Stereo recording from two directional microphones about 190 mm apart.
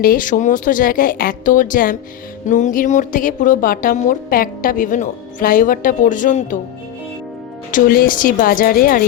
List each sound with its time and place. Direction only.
0.0 s a woman's voice: 45° left (ahead or behind)
7.7 s a woman's voice: 50° left (ahead or behind)